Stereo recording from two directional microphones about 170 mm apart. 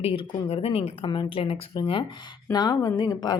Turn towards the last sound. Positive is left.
turn(degrees=25)  # may be behind; listen again after turning